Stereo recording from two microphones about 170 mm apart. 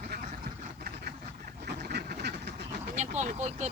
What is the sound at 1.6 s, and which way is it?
Duck, 70° right (ahead or behind).